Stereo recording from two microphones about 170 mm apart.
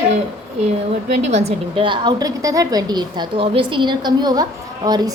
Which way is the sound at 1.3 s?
40° right (ahead or behind).